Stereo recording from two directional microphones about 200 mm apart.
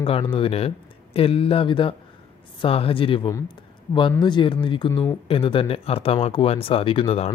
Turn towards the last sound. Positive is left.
turn(degrees=30)  # may be behind; listen again after turning